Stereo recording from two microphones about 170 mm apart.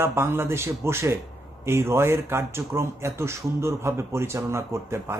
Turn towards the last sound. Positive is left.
turn(degrees=-15)  # may be behind; listen again after turning